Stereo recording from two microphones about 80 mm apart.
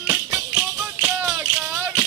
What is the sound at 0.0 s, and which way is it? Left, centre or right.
Music, centre.